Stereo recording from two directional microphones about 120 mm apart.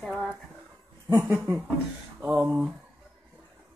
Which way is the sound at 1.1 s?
20° right (ahead or behind).